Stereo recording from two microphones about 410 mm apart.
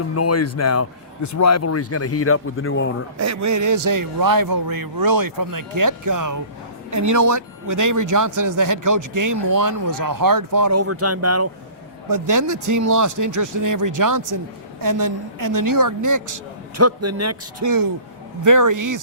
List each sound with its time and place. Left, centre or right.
0.2 s speech: left
3.2 s speech: right
12.0 s a man's voice: right